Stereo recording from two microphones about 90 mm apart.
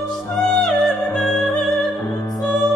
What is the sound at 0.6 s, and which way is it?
Music, 5° left (ahead or behind).